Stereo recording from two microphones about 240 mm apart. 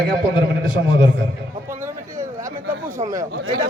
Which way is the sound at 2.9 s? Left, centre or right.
Centre.